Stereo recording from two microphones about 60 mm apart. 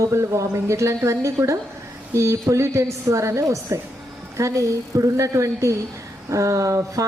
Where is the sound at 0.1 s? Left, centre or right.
Right.